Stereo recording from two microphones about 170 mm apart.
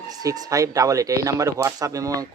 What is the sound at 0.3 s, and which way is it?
Speech, 20° right (ahead or behind).